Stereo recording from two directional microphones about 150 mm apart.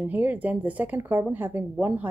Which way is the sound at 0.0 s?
10° right (ahead or behind).